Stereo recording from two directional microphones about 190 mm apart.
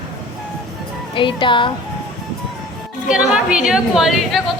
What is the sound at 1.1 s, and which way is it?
Speech, 25° left (ahead or behind).